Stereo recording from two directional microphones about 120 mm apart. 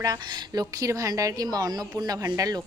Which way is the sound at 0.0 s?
35° right (ahead or behind).